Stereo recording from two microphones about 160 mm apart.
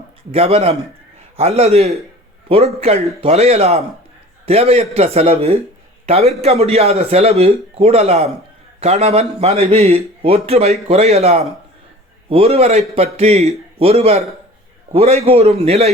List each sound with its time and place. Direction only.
0.3 s a man's voice: 40° right (ahead or behind)